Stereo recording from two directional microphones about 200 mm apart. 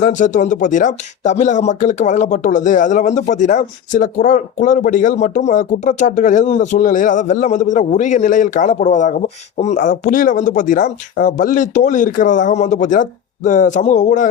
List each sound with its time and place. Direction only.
0.0 s speech: 40° left (ahead or behind)